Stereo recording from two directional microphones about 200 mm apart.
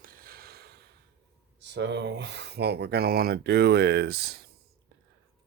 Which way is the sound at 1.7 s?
60° right (ahead or behind).